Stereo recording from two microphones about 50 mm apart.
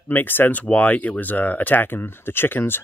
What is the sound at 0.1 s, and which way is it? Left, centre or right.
Speech, left.